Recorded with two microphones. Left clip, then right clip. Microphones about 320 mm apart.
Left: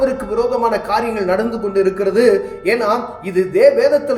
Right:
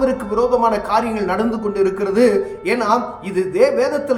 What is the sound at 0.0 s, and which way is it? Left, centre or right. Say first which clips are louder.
Speech: left 1 dB; centre.